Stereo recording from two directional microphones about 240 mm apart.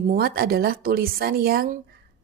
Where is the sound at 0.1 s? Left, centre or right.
Right.